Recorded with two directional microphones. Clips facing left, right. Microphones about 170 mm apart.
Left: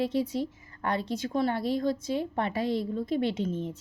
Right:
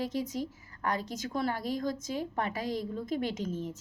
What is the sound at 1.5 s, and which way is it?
Speech, 40° right (ahead or behind).